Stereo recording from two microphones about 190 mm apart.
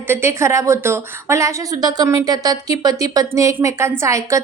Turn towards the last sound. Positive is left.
turn(degrees=-15)  # may be behind; listen again after turning